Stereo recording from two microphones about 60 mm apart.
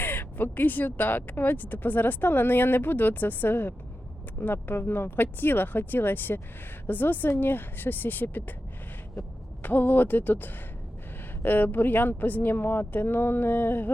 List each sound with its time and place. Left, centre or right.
0.0 s speech: left
9.6 s speech: left